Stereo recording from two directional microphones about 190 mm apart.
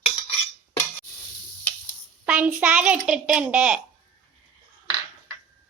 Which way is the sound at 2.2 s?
10° right (ahead or behind).